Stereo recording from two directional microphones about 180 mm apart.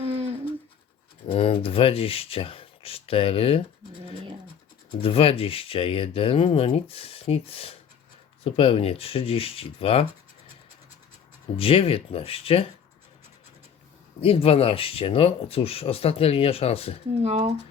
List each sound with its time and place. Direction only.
0.0 s a sound: 35° right (ahead or behind)
1.3 s speech: 30° left (ahead or behind)
4.9 s speech: 30° left (ahead or behind)
11.5 s speech: 30° left (ahead or behind)
14.2 s speech: 30° left (ahead or behind)
17.2 s speech: 40° right (ahead or behind)